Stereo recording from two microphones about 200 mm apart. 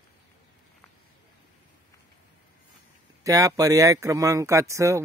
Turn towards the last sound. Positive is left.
turn(degrees=-15)  # may be behind; listen again after turning